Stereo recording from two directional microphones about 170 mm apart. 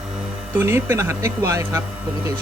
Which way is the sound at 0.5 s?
15° right (ahead or behind).